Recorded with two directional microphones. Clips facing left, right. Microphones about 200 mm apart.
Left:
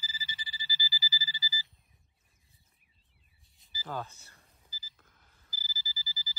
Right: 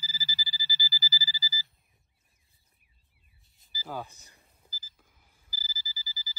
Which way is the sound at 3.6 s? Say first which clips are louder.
Right 1 dB; centre (ahead or behind).